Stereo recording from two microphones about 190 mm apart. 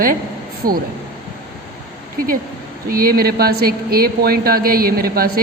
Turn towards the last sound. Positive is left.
turn(degrees=-50)  # may be behind; listen again after turning